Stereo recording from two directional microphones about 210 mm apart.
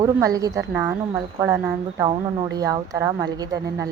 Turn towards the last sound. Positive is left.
turn(degrees=-15)  # may be behind; listen again after turning